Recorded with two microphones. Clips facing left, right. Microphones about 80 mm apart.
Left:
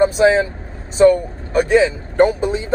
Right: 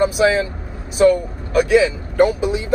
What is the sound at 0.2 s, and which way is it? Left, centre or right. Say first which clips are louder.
Speech: left 3 dB; left.